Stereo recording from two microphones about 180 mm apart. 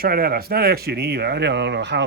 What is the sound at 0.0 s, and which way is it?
Speech, 55° right (ahead or behind).